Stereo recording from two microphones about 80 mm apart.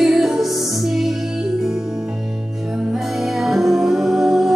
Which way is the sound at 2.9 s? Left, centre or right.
Centre.